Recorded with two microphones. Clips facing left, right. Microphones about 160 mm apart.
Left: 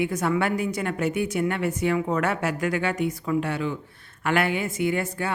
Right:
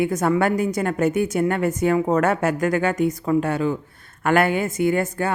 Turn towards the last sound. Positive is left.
turn(degrees=-45)  # may be behind; listen again after turning